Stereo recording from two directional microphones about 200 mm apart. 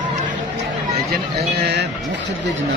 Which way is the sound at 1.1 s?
55° right (ahead or behind).